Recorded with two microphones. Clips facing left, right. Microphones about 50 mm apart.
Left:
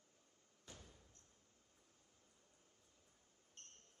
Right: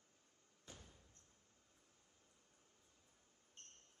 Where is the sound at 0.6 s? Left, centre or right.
Right.